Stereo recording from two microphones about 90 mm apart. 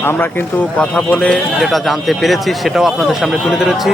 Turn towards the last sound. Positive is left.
turn(degrees=0)  # may be behind; listen again after turning